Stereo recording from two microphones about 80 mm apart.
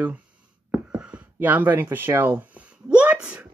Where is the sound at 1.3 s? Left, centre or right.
Right.